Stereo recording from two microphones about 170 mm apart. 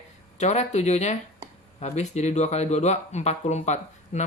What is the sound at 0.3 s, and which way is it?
Speech, 40° left (ahead or behind).